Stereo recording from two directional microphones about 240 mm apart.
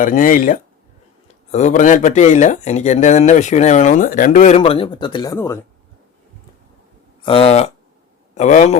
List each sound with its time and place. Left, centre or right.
0.0 s speech: left; by 5.5 s centre
7.2 s speech: left